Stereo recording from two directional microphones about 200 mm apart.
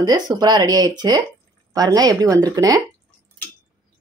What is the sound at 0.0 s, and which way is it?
Speech, 20° right (ahead or behind).